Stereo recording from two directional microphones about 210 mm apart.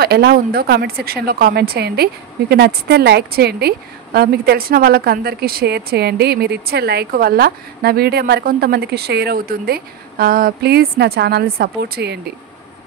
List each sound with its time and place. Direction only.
0.0 s a woman's voice: 50° right (ahead or behind)